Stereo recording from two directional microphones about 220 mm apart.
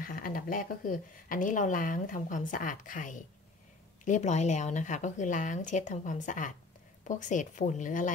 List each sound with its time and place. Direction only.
0.0 s speech: 40° left (ahead or behind)